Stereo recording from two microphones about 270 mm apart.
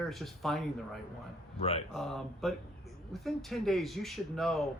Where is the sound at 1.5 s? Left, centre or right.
Left.